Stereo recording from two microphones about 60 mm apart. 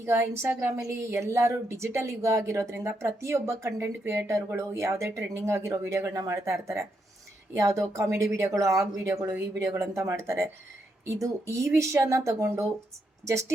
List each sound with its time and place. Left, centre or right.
0.0 s speech: right
3.8 s a woman's voice: right